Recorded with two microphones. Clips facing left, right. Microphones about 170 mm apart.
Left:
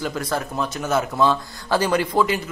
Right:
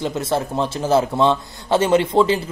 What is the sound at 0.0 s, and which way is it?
Speech, 25° right (ahead or behind).